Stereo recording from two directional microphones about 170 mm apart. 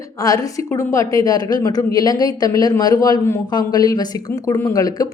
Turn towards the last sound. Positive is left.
turn(degrees=20)  # may be behind; listen again after turning